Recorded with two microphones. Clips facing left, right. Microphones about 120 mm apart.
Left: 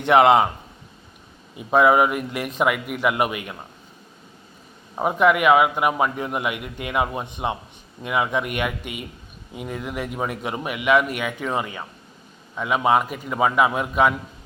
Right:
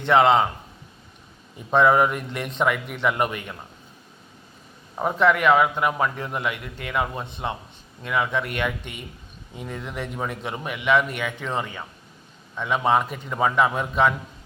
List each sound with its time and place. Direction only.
0.0 s a man's voice: 15° left (ahead or behind)
1.5 s a man's voice: 10° left (ahead or behind)
4.9 s a man's voice: 10° left (ahead or behind)